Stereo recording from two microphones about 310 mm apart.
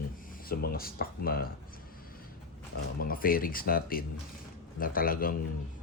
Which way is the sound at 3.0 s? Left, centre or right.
Left.